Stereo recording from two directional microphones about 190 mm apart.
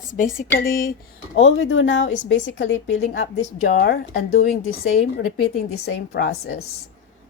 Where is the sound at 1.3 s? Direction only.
85° left.